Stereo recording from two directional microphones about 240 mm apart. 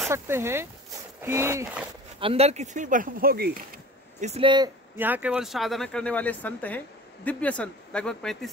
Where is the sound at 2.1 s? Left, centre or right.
Right.